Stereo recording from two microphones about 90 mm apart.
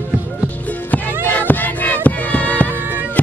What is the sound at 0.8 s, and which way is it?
Music, 20° left (ahead or behind).